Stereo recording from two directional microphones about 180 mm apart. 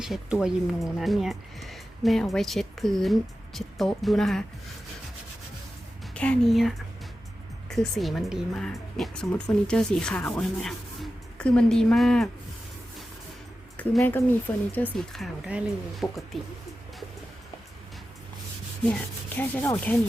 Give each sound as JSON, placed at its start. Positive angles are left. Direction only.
{"t": 0.0, "sound": "speech", "side_deg": 0}
{"t": 6.1, "sound": "speech", "side_deg": 5}
{"t": 13.7, "sound": "speech", "side_deg": 10}
{"t": 19.4, "sound": "speech", "side_deg": 10}